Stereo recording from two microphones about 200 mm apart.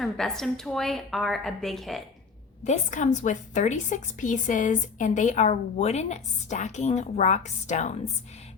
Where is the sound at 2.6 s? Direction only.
40° left (ahead or behind).